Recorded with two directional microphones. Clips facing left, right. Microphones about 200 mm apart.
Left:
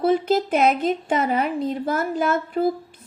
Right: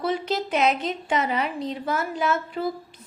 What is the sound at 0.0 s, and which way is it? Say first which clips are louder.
A woman's voice: left 7 dB; 50° left (ahead or behind).